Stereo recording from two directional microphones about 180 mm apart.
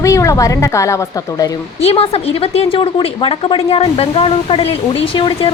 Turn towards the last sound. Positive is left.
turn(degrees=25)  # may be behind; listen again after turning